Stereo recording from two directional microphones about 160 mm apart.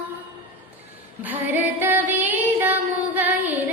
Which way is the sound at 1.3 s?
10° right (ahead or behind).